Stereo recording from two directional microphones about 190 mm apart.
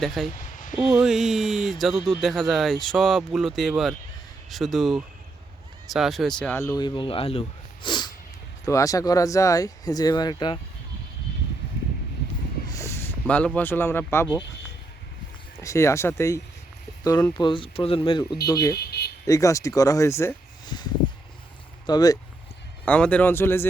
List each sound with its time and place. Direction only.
0.0 s speech: centre (ahead or behind)
0.3 s a sound: 45° left (ahead or behind)
0.8 s speech: centre (ahead or behind); by 10.6 s 20° left (ahead or behind)
12.6 s speech: 15° left (ahead or behind)
15.6 s speech: 15° left (ahead or behind)
18.7 s a sound: 55° left (ahead or behind)
19.2 s speech: 15° left (ahead or behind)
21.8 s speech: 20° left (ahead or behind)
22.9 s speech: 5° left (ahead or behind)